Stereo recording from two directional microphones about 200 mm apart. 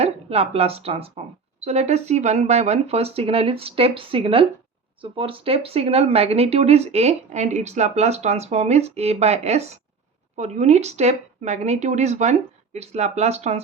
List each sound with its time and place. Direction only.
0.0 s speech: 30° right (ahead or behind)